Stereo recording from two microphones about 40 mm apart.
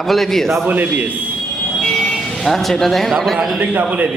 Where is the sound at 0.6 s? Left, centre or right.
Right.